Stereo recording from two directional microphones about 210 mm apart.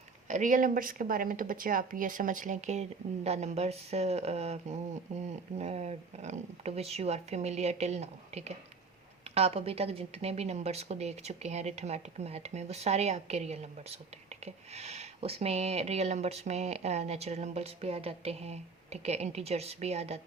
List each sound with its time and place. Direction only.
0.3 s speech: 35° right (ahead or behind)